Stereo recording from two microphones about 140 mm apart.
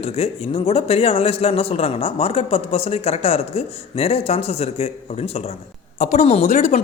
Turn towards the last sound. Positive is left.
turn(degrees=60)  # may be behind; listen again after turning